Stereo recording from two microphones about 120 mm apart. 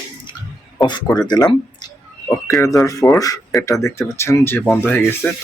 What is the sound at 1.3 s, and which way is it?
Speech, 35° left (ahead or behind).